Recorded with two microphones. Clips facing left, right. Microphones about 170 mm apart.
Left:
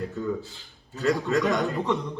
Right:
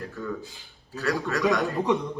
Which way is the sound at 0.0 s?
20° left (ahead or behind).